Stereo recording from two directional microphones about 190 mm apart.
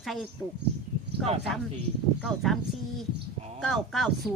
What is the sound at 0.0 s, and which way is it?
Speech, centre (ahead or behind).